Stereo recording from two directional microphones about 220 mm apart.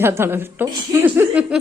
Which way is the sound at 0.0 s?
10° right (ahead or behind).